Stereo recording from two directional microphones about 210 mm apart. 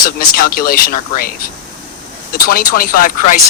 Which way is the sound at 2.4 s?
45° left (ahead or behind).